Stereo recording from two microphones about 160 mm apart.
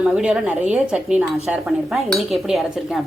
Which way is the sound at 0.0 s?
5° right (ahead or behind).